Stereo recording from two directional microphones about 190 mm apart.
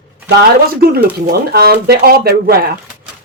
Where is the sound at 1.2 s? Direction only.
55° right (ahead or behind).